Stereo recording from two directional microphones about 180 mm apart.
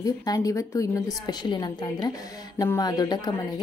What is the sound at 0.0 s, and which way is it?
Speech, 20° left (ahead or behind).